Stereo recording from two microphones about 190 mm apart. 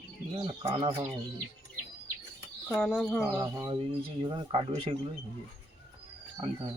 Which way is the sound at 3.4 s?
20° right (ahead or behind).